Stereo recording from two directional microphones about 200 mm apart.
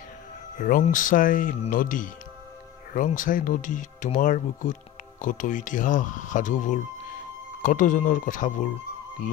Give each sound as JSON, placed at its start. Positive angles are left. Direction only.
{"t": 0.6, "sound": "speech", "side_deg": 40}